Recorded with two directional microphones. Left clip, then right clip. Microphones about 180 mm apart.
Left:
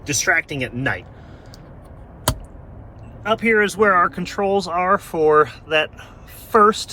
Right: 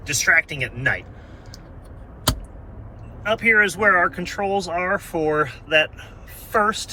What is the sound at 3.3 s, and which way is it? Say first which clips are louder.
Speech: even; 25° left (ahead or behind).